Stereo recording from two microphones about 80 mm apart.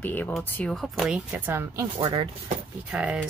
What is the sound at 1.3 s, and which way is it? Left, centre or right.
Speech, right.